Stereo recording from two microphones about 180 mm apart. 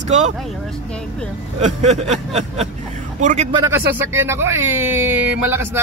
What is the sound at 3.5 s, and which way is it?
Speech, 15° right (ahead or behind).